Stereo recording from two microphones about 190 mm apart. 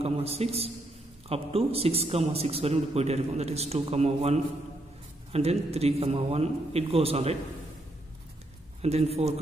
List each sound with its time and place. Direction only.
0.0 s a man's voice: 30° right (ahead or behind)
8.8 s a man's voice: 35° right (ahead or behind)